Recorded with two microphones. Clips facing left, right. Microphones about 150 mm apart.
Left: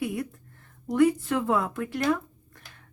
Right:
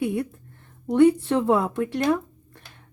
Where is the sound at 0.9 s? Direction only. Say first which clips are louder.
Right 5 dB; 30° right (ahead or behind).